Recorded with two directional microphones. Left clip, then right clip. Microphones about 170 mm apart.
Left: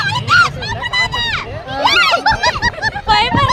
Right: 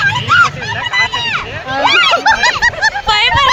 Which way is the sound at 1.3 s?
35° right (ahead or behind).